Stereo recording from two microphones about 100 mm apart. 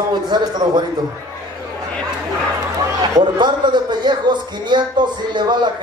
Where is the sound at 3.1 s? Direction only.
45° right (ahead or behind).